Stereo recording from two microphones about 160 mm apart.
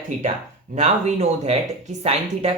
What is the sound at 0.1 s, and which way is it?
Speech, 50° right (ahead or behind).